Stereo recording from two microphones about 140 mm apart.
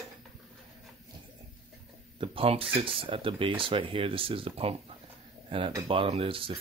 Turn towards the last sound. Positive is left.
turn(degrees=-40)  # may be behind; listen again after turning